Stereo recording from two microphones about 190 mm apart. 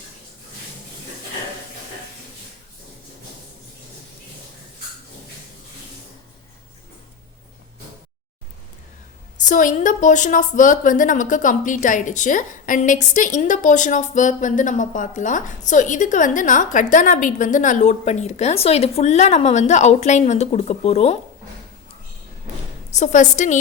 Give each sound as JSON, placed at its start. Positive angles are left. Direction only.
{"t": 9.5, "sound": "a woman's voice", "side_deg": 40}
{"t": 22.9, "sound": "a woman's voice", "side_deg": 40}